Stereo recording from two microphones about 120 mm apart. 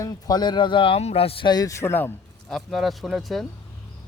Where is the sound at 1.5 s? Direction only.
30° left (ahead or behind).